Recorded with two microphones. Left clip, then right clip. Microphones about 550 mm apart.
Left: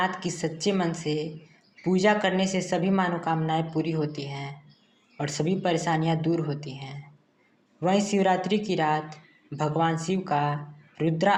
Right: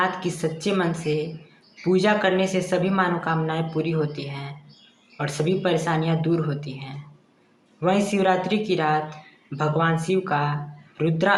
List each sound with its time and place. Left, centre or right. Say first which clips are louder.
0.0 s a woman's voice: right 4 dB; right